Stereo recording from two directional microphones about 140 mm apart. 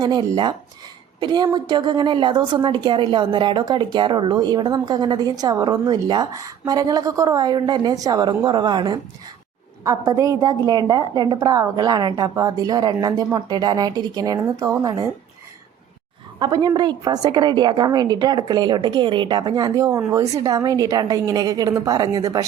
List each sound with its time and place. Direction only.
0.0 s a woman's voice: 30° right (ahead or behind)
16.4 s a woman's voice: 30° right (ahead or behind)